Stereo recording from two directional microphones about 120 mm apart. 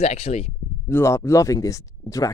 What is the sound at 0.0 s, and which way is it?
Speech, 60° left (ahead or behind).